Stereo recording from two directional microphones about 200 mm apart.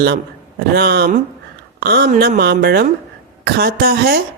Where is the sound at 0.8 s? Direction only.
50° right (ahead or behind).